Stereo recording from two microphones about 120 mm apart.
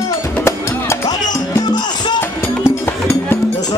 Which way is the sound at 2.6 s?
25° left (ahead or behind).